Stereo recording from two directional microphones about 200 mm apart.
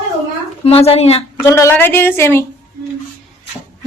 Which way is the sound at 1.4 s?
15° left (ahead or behind).